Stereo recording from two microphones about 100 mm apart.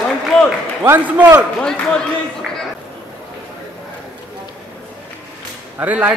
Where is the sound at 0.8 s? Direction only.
20° right (ahead or behind).